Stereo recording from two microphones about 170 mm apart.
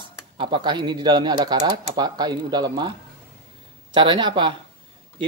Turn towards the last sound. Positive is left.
turn(degrees=-30)  # may be behind; listen again after turning